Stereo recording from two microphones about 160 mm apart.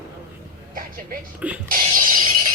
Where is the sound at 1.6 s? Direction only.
60° right (ahead or behind).